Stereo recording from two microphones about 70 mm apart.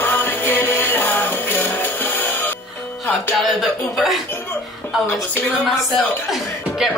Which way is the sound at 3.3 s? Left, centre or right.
Centre.